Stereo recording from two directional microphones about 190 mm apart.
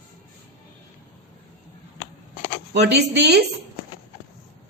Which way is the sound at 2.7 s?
60° right (ahead or behind).